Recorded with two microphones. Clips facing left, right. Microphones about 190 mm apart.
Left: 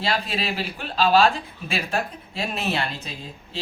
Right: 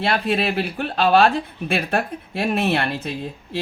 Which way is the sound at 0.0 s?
60° right (ahead or behind).